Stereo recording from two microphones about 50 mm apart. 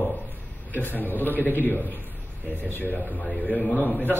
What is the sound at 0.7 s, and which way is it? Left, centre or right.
A man's voice, left.